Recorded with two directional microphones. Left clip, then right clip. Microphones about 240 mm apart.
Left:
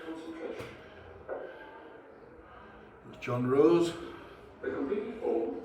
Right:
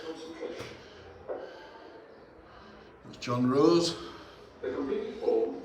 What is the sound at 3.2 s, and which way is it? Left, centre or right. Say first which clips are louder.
Speech: even; centre.